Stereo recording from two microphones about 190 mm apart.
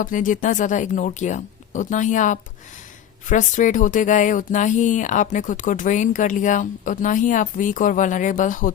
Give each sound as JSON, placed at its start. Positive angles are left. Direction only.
{"t": 0.0, "sound": "speech", "side_deg": 45}